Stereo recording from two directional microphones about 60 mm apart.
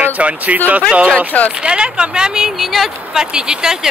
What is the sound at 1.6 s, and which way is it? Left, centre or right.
Speech, centre.